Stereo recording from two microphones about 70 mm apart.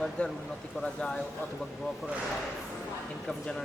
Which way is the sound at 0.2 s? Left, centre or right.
Centre.